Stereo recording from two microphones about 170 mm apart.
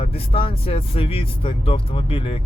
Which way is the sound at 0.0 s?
35° left (ahead or behind).